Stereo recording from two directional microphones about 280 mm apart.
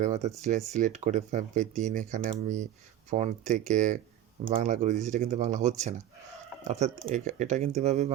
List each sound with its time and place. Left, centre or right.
0.0 s speech: right